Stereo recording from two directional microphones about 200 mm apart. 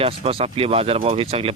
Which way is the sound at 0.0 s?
30° right (ahead or behind).